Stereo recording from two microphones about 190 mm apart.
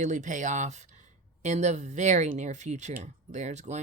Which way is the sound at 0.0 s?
40° right (ahead or behind).